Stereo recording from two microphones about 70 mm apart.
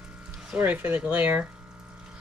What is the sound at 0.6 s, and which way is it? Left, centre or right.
Speech, right.